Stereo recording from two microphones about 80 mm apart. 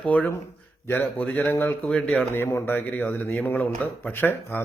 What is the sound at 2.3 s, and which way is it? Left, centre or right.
Speech, left.